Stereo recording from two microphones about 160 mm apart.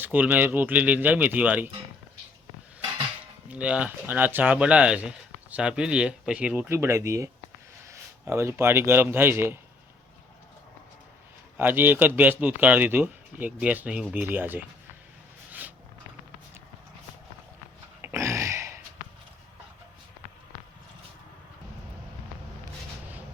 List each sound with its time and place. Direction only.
0.0 s speech: 10° right (ahead or behind)
3.5 s a man's voice: 10° right (ahead or behind)
11.5 s speech: 10° right (ahead or behind)
18.0 s a sound: 20° right (ahead or behind)